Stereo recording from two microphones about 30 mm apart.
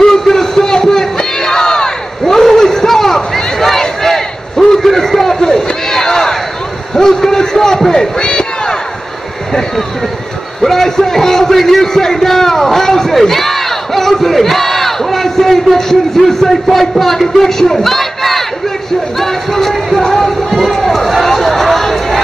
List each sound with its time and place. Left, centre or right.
0.0 s crowd: centre
3.8 s battle cry: centre
7.0 s a sound: centre
10.6 s a sound: centre
16.7 s a man's voice: centre
17.4 s battle cry: centre
19.1 s a sound: centre
20.0 s music: centre
20.7 s run: centre